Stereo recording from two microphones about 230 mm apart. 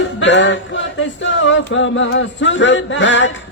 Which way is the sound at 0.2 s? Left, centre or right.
Left.